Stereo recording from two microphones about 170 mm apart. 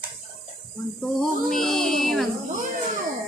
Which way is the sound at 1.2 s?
Centre (ahead or behind).